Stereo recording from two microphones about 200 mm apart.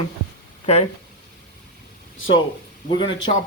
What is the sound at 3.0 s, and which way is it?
Speech, 20° left (ahead or behind).